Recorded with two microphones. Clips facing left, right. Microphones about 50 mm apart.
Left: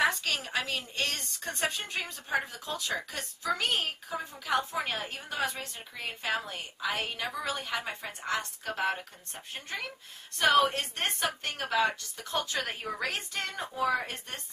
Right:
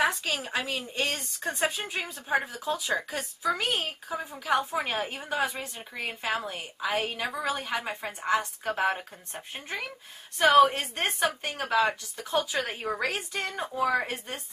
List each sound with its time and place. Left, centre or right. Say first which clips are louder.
0.0 s a woman's voice: right 1 dB; centre